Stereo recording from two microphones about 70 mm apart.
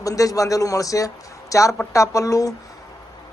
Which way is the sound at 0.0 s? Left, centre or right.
Left.